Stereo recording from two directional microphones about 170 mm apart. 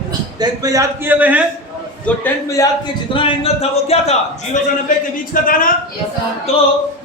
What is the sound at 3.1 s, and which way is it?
Speech, 35° left (ahead or behind).